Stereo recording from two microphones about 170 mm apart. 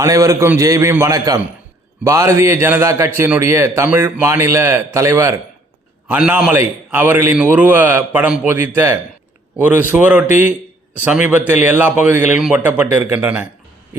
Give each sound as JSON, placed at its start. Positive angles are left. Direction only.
{"t": 0.0, "sound": "a man's voice", "side_deg": -20}